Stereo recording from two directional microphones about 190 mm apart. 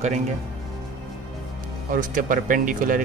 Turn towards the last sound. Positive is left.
turn(degrees=-45)  # may be behind; listen again after turning